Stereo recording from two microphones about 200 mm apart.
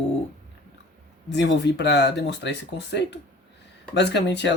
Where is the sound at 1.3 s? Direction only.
60° left (ahead or behind).